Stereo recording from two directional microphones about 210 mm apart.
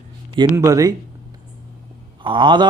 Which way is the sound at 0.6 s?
15° right (ahead or behind).